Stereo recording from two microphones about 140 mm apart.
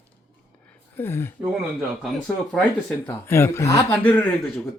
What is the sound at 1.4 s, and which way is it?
Speech, 5° right (ahead or behind).